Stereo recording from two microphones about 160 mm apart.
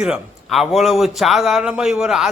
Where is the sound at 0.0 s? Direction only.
5° right (ahead or behind).